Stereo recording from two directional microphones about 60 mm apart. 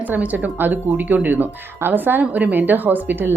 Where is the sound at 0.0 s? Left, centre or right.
Right.